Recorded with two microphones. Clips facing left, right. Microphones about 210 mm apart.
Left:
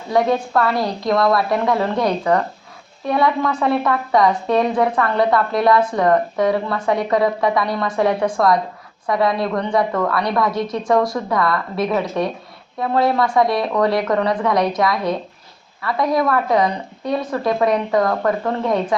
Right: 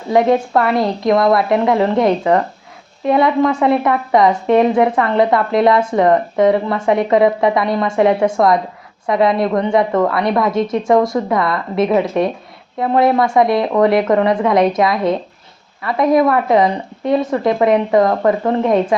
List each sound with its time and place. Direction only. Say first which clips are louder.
0.1 s a woman's voice: right 4 dB; 20° right (ahead or behind)